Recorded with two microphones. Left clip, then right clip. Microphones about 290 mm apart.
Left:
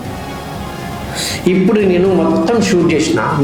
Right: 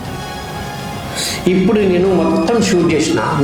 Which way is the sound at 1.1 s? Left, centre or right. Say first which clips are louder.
Left 1 dB; left.